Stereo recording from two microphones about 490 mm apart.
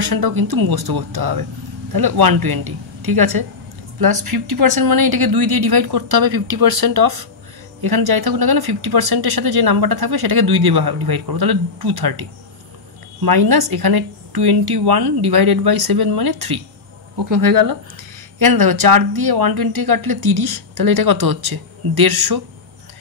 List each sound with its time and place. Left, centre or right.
0.0 s speech: right